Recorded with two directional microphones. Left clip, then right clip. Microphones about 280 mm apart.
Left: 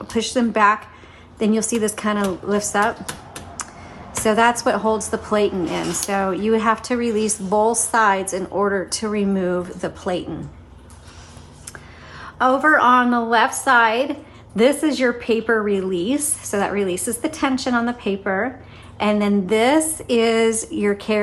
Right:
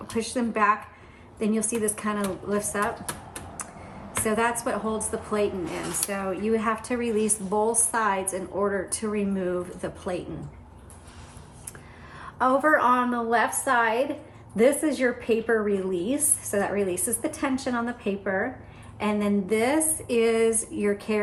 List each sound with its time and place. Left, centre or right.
0.1 s a woman's voice: centre
4.2 s a woman's voice: centre
12.1 s a woman's voice: centre